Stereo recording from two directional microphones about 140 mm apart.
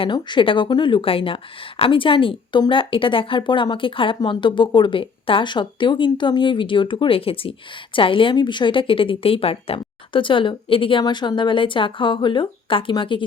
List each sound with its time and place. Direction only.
0.0 s a woman's voice: 35° left (ahead or behind)